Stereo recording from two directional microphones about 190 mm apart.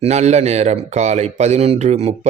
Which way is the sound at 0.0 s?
35° right (ahead or behind).